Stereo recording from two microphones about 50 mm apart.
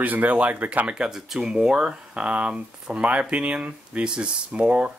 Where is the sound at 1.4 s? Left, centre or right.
Centre.